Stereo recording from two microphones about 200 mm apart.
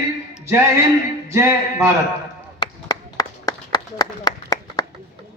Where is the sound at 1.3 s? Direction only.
15° right (ahead or behind).